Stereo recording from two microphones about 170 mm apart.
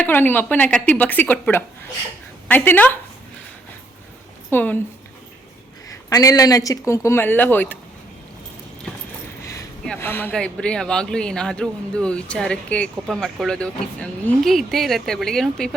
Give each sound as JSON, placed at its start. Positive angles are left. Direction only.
{"t": 0.0, "sound": "speech", "side_deg": 10}
{"t": 4.4, "sound": "speech", "side_deg": 10}
{"t": 6.1, "sound": "speech", "side_deg": 20}
{"t": 9.8, "sound": "speech", "side_deg": 10}